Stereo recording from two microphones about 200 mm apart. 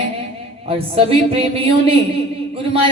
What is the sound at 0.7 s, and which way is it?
A man's voice, 30° right (ahead or behind).